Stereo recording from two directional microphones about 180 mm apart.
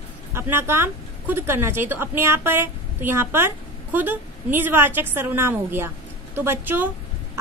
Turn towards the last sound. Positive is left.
turn(degrees=-10)  # may be behind; listen again after turning